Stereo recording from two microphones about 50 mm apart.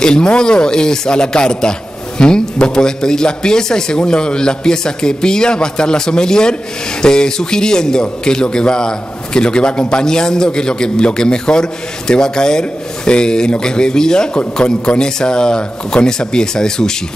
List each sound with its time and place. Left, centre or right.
0.0 s a man's voice: centre